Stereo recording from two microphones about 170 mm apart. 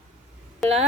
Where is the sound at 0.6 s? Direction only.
Centre (ahead or behind).